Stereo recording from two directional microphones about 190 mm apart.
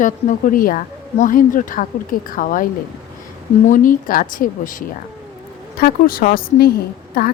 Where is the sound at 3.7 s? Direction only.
45° left (ahead or behind).